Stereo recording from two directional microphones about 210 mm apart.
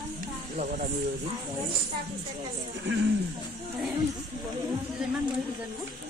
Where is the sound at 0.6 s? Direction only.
35° right (ahead or behind).